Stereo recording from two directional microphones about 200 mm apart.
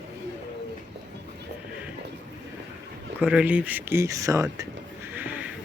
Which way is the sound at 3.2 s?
5° right (ahead or behind).